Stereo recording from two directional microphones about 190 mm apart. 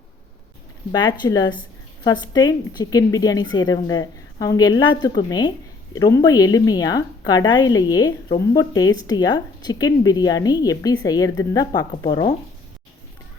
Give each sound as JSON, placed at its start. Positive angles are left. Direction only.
{"t": 0.9, "sound": "a woman's voice", "side_deg": 20}